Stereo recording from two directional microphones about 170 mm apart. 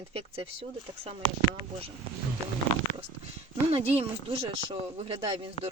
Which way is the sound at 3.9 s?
35° right (ahead or behind).